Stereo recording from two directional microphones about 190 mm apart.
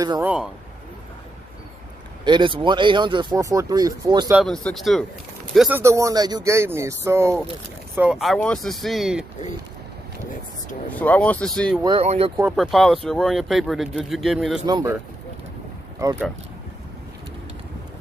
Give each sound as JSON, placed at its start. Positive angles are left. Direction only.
{"t": 0.2, "sound": "speech", "side_deg": -5}
{"t": 2.2, "sound": "speech", "side_deg": -25}
{"t": 4.3, "sound": "speech", "side_deg": 0}
{"t": 5.7, "sound": "speech", "side_deg": -15}
{"t": 11.0, "sound": "speech", "side_deg": 5}
{"t": 11.8, "sound": "speech", "side_deg": -30}
{"t": 12.4, "sound": "speech", "side_deg": 0}
{"t": 14.7, "sound": "speech", "side_deg": -20}
{"t": 16.0, "sound": "speech", "side_deg": -15}